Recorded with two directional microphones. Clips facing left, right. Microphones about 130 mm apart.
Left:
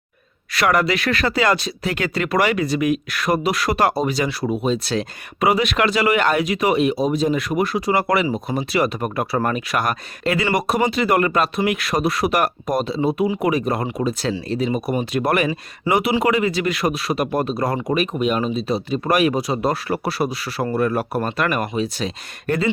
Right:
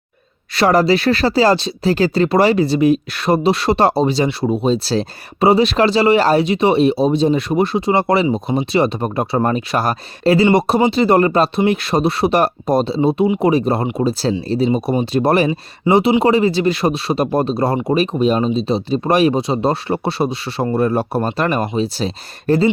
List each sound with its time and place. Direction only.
0.5 s speech: 30° right (ahead or behind)